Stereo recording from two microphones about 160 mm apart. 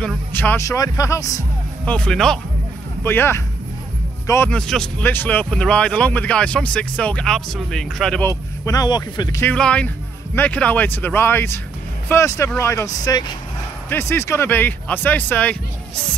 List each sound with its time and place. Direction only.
0.3 s speech: 10° left (ahead or behind)
1.9 s speech: 5° left (ahead or behind)
3.0 s speech: 15° left (ahead or behind)
8.6 s speech: 25° left (ahead or behind)
9.4 s speech: 10° left (ahead or behind)